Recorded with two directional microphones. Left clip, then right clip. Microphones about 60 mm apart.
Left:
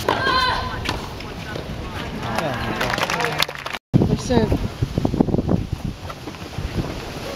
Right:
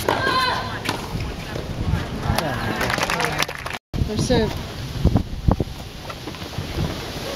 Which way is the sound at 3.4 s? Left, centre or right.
Left.